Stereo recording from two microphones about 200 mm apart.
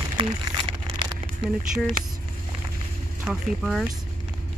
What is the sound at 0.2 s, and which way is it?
Speech, 25° right (ahead or behind).